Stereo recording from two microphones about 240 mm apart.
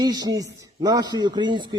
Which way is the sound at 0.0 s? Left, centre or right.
Centre.